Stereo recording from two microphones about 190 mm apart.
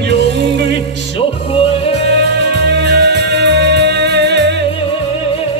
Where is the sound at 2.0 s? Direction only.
65° right (ahead or behind).